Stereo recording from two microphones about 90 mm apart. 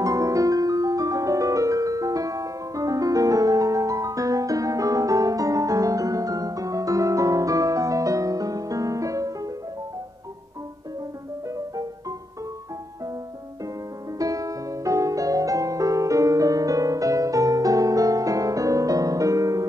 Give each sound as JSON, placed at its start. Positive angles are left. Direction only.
{"t": 0.0, "sound": "music", "side_deg": -40}
{"t": 11.5, "sound": "music", "side_deg": -40}
{"t": 14.1, "sound": "music", "side_deg": -40}